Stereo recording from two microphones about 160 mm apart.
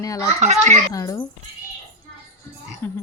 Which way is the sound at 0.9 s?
20° left (ahead or behind).